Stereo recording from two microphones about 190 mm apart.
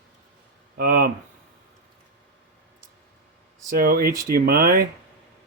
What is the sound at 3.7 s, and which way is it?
Speech, 50° right (ahead or behind).